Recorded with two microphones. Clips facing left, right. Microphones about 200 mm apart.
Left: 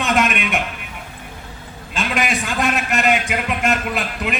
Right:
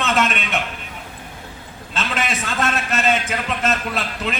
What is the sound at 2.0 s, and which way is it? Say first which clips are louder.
A man's voice: left 3 dB; 15° left (ahead or behind).